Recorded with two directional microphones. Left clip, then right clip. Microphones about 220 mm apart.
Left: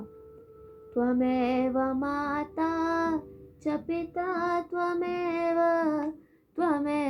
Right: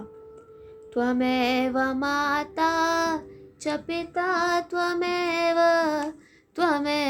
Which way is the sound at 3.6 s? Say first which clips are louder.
Right 2 dB; 25° right (ahead or behind).